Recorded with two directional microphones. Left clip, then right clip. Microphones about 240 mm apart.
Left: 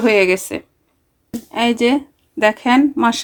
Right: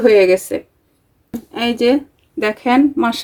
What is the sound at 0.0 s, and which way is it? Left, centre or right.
Speech, left.